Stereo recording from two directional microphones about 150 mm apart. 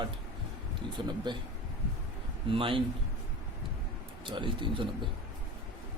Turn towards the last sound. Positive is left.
turn(degrees=-35)  # may be behind; listen again after turning